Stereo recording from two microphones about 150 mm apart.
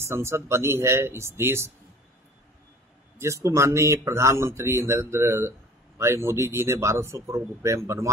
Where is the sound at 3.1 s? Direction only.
20° right (ahead or behind).